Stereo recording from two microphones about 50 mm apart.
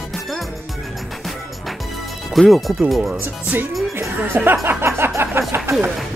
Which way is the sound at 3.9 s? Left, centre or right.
Right.